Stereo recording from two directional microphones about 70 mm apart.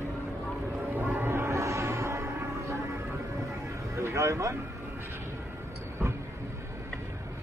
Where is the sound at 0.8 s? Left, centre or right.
Right.